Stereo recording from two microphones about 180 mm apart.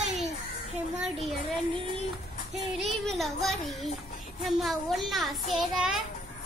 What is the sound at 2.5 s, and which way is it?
A child's voice, centre (ahead or behind).